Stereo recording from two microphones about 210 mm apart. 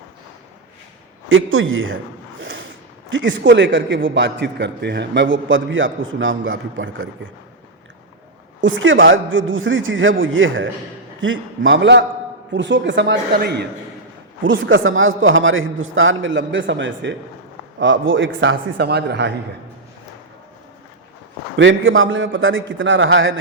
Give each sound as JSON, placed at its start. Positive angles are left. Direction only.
{"t": 1.3, "sound": "a man's voice", "side_deg": -70}
{"t": 2.4, "sound": "a sound", "side_deg": -65}
{"t": 3.1, "sound": "a man's voice", "side_deg": -65}
{"t": 8.6, "sound": "a man's voice", "side_deg": -65}
{"t": 14.4, "sound": "a man's voice", "side_deg": -65}
{"t": 21.5, "sound": "a man's voice", "side_deg": -65}